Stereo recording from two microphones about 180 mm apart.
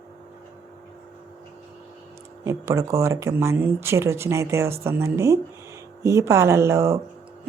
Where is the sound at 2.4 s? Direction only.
15° right (ahead or behind).